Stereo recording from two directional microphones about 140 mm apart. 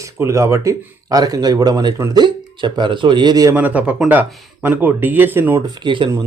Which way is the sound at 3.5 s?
10° right (ahead or behind).